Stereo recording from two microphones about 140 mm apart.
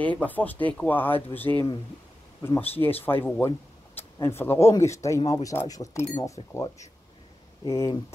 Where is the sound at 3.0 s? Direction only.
15° left (ahead or behind).